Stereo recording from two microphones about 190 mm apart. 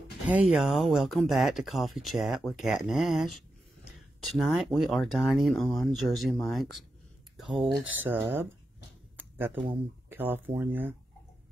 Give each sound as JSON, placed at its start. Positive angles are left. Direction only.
{"t": 0.3, "sound": "speech", "side_deg": -5}
{"t": 10.0, "sound": "speech", "side_deg": -10}